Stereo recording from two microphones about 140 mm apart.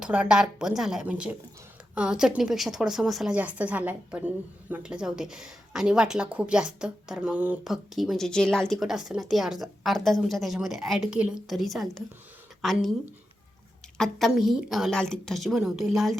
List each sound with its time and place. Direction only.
0.0 s a woman's voice: 5° right (ahead or behind)
14.0 s speech: centre (ahead or behind)